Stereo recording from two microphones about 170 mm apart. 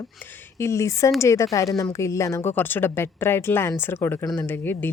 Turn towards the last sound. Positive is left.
turn(degrees=10)  # may be behind; listen again after turning